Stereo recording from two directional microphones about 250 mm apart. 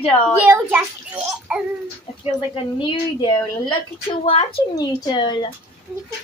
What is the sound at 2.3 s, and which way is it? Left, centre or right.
A woman's voice, left.